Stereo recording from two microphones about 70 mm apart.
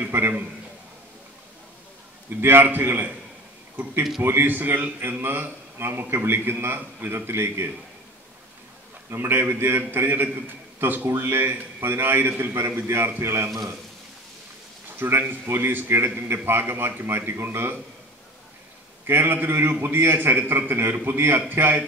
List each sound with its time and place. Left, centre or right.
0.0 s a man's voice: right
2.4 s a man's voice: right
4.2 s a man's voice: right
9.1 s a man's voice: right
15.0 s a man's voice: right
19.0 s a man's voice: right